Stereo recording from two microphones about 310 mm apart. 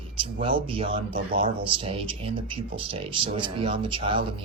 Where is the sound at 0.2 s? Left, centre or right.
Centre.